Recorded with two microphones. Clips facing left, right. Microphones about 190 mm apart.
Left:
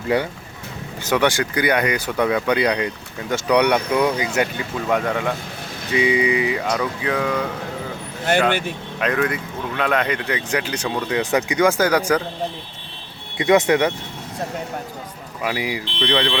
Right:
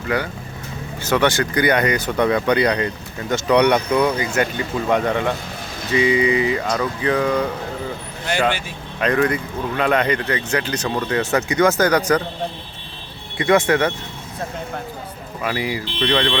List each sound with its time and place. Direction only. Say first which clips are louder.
0.1 s speech: left 2 dB; 30° left (ahead or behind)
1.0 s speech: right 1 dB; 10° left (ahead or behind)
4.9 s speech: right 2 dB; centre (ahead or behind)
5.9 s speech: right 2 dB; 10° left (ahead or behind)
8.2 s speech: left 2 dB; 55° left (ahead or behind)
9.0 s speech: right 3 dB; 5° left (ahead or behind)
13.3 s speech: left 1 dB; 20° left (ahead or behind)
15.4 s speech: right 1 dB; 10° left (ahead or behind)